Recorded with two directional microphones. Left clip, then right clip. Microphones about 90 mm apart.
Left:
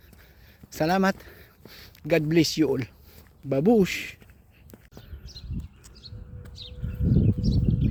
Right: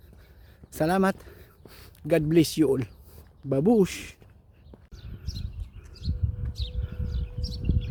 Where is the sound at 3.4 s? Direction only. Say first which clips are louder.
Left 1 dB; 20° right (ahead or behind).